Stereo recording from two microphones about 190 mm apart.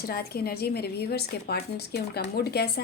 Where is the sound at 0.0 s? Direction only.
55° left (ahead or behind).